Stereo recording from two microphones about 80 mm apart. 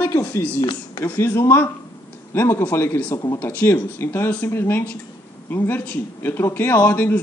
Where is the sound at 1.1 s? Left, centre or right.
Left.